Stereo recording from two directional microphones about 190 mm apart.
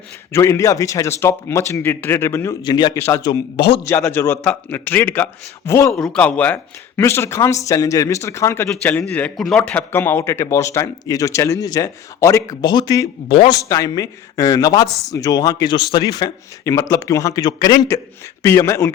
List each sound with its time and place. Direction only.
0.3 s speech: 15° left (ahead or behind)
3.8 s speech: 15° left (ahead or behind)
5.9 s speech: 5° left (ahead or behind); by 13.6 s 30° left (ahead or behind)
13.6 s speech: 15° left (ahead or behind)